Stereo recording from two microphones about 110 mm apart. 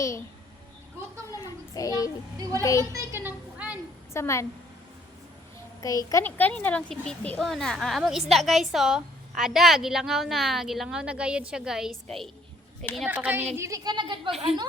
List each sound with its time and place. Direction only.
1.4 s child singing: 35° left (ahead or behind)
2.4 s a woman's voice: 30° right (ahead or behind)
3.2 s a sound: 10° right (ahead or behind)
4.1 s a woman's voice: 25° left (ahead or behind)
5.8 s a child's voice: 30° left (ahead or behind)
6.2 s speech: 15° left (ahead or behind)
13.1 s speech: 15° right (ahead or behind)
13.6 s a woman's voice: 30° right (ahead or behind)